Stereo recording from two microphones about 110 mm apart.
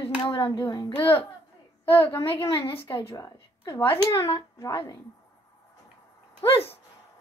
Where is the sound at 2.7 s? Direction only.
50° left (ahead or behind).